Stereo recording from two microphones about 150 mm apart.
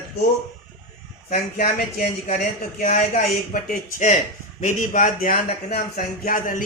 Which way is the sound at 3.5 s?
60° left (ahead or behind).